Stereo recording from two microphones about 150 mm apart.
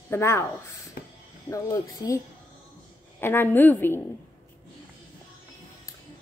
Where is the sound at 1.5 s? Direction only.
25° left (ahead or behind).